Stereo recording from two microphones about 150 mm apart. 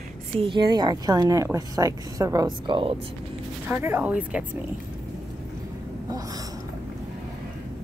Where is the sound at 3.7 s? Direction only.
15° right (ahead or behind).